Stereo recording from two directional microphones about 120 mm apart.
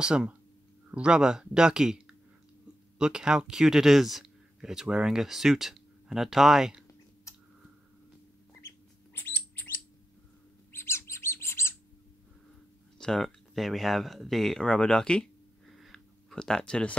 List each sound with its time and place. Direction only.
0.0 s speech: 5° right (ahead or behind)
3.0 s speech: 5° right (ahead or behind)
9.1 s bird: 15° left (ahead or behind)
10.7 s chirp: 20° left (ahead or behind)
13.0 s speech: centre (ahead or behind)
15.7 s a sound: centre (ahead or behind)